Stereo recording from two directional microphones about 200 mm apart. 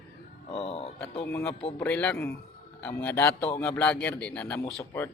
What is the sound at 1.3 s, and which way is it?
A man's voice, 5° left (ahead or behind).